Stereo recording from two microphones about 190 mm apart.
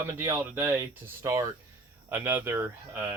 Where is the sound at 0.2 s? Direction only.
10° right (ahead or behind).